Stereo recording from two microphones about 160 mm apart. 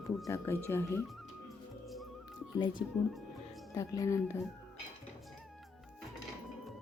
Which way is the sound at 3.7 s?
20° left (ahead or behind).